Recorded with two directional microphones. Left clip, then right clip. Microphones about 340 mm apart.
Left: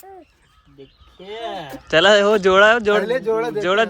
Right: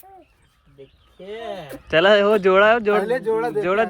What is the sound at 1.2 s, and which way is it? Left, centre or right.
Speech, centre.